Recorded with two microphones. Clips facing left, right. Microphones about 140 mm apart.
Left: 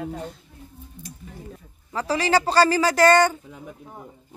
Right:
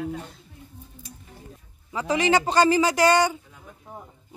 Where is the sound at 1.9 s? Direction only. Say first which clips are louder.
Even; 20° right (ahead or behind).